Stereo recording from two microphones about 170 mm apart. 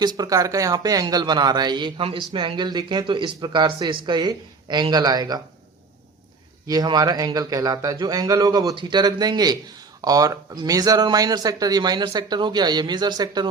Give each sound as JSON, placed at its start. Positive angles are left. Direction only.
{"t": 0.0, "sound": "speech", "side_deg": -25}
{"t": 6.7, "sound": "speech", "side_deg": -25}